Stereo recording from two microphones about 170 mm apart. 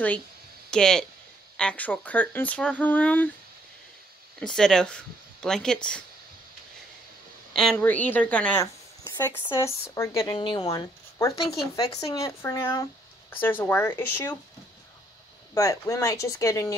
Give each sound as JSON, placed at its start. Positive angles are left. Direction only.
{"t": 0.7, "sound": "speech", "side_deg": 5}
{"t": 4.4, "sound": "speech", "side_deg": 5}
{"t": 7.5, "sound": "speech", "side_deg": 5}
{"t": 9.9, "sound": "speech", "side_deg": 15}
{"t": 15.5, "sound": "speech", "side_deg": 20}